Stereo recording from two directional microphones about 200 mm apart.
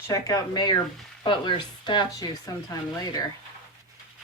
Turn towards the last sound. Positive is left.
turn(degrees=20)  # may be behind; listen again after turning